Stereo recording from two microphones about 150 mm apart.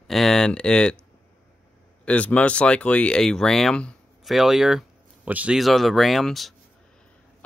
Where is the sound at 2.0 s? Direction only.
10° left (ahead or behind).